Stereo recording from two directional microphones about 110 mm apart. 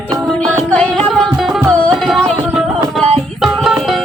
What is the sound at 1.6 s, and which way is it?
Music, 10° left (ahead or behind).